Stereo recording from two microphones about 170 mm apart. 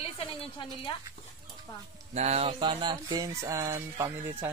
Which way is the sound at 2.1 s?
40° right (ahead or behind).